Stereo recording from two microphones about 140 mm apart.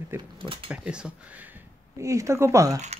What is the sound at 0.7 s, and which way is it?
Speech, 5° right (ahead or behind).